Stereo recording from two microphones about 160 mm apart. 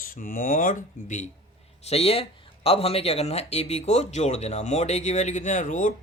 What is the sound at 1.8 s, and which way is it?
Speech, 40° left (ahead or behind).